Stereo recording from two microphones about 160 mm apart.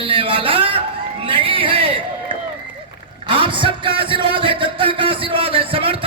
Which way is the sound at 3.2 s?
30° right (ahead or behind).